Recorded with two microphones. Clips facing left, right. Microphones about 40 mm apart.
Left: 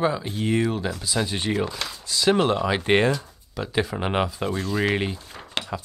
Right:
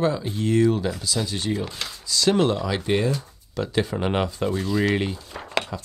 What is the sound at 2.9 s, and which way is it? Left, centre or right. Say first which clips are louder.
Speech: left 3 dB; left.